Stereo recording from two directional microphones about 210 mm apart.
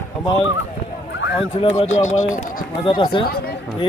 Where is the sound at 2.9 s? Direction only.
25° left (ahead or behind).